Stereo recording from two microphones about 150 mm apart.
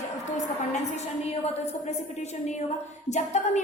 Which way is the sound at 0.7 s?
45° left (ahead or behind).